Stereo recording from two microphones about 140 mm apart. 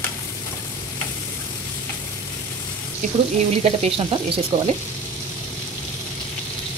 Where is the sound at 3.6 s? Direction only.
45° right (ahead or behind).